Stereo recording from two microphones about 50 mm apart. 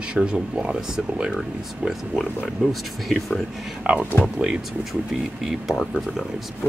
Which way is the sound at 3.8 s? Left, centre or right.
Right.